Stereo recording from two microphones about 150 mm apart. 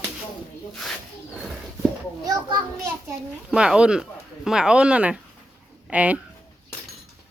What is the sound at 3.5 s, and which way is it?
Speech, 5° right (ahead or behind).